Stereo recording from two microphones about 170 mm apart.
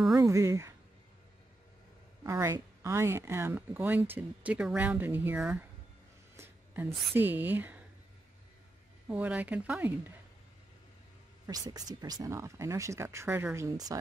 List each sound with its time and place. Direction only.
0.1 s speech: 20° right (ahead or behind)
2.2 s speech: 15° right (ahead or behind)
6.3 s a sound: 15° right (ahead or behind)
7.2 s speech: 10° right (ahead or behind)
9.1 s speech: 10° right (ahead or behind)
11.4 s speech: 20° right (ahead or behind)